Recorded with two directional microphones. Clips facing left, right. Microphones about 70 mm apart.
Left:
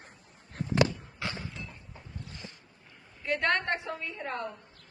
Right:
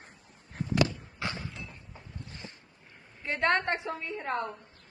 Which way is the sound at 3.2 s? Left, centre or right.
Right.